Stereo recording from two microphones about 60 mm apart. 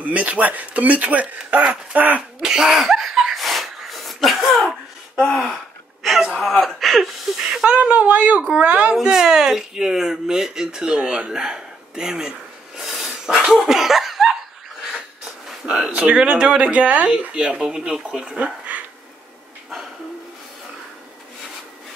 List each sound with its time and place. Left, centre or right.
0.0 s speech: right
2.4 s a sound: centre
5.1 s gasp: centre
6.3 s speech: centre
7.3 s speech: centre
7.7 s speech: right
8.9 s speech: centre
15.8 s speech: centre